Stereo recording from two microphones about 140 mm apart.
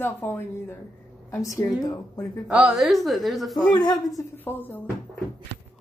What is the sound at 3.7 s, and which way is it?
Speech, 30° left (ahead or behind).